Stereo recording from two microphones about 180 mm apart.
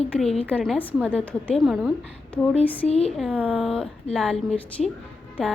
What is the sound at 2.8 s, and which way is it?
Speech, 35° left (ahead or behind).